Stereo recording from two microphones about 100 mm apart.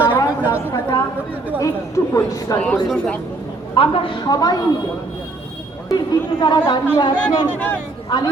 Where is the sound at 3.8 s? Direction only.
60° left (ahead or behind).